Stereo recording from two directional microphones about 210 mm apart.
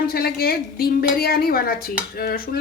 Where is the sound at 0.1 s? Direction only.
45° left (ahead or behind).